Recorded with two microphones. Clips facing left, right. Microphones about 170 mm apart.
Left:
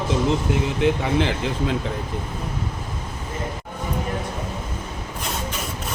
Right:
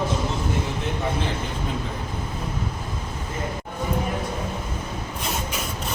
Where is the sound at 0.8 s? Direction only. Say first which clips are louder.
Left 7 dB; 90° left.